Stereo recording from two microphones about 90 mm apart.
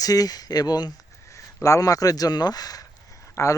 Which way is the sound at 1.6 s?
40° left (ahead or behind).